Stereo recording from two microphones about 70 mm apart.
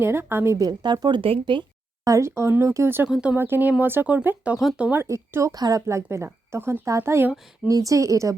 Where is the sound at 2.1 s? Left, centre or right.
Right.